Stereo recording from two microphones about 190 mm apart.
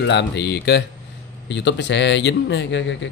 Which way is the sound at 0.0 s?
65° left (ahead or behind).